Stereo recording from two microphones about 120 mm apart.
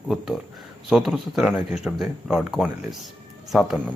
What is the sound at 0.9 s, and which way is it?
Speech, centre (ahead or behind).